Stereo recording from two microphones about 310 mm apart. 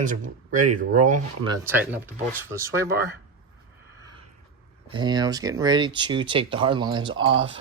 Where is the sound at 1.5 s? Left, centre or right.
Centre.